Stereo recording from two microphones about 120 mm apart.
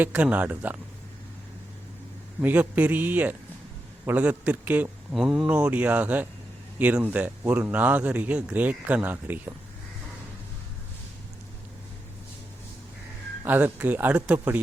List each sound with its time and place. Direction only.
0.0 s speech: 10° right (ahead or behind)
2.4 s speech: 15° right (ahead or behind)
5.1 s speech: centre (ahead or behind); by 9.6 s 15° right (ahead or behind)
13.4 s speech: 15° right (ahead or behind)